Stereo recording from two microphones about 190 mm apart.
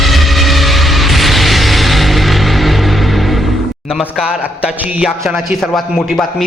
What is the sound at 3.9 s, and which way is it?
A man's voice, 5° right (ahead or behind).